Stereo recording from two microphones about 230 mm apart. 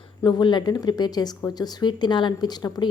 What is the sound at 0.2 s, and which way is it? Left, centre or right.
A woman's voice, centre.